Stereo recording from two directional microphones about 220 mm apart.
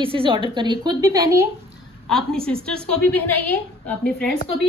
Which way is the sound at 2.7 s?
5° left (ahead or behind).